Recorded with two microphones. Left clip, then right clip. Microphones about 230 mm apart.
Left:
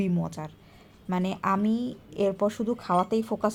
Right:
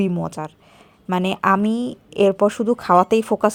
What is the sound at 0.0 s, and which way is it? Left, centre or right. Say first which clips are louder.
A woman's voice: right 8 dB; right.